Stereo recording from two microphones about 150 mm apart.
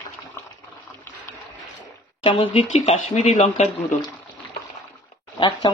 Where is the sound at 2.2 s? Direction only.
40° left (ahead or behind).